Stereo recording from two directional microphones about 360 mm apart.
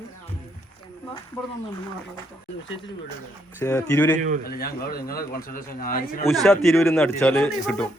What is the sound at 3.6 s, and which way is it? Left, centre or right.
Speech, centre.